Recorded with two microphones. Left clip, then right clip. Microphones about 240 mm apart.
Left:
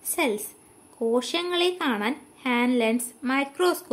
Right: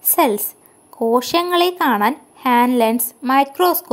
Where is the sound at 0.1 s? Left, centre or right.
Right.